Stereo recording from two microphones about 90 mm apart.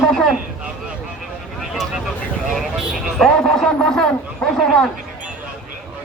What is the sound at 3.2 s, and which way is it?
A man's voice, 5° left (ahead or behind).